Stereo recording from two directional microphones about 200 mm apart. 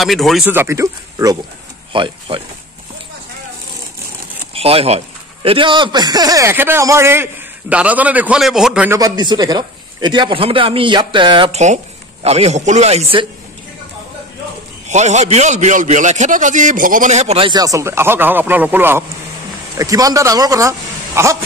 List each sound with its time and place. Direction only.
0.0 s speech: centre (ahead or behind)
0.5 s a man's voice: 10° right (ahead or behind)
4.6 s a man's voice: 30° right (ahead or behind)
14.9 s a man's voice: 35° right (ahead or behind); by 21.4 s 15° right (ahead or behind)